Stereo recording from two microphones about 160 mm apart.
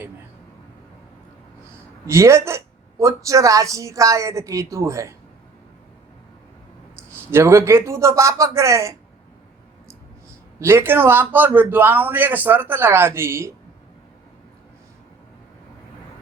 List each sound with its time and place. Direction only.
2.0 s speech: 20° right (ahead or behind)
7.3 s a man's voice: 15° right (ahead or behind)
10.6 s a man's voice: 15° right (ahead or behind)